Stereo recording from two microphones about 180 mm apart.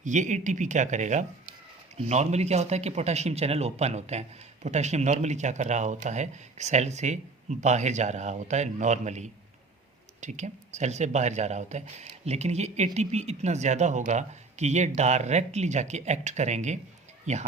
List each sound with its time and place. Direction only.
0.0 s speech: 40° right (ahead or behind)